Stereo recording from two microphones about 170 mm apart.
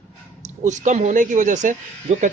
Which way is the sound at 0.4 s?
45° right (ahead or behind).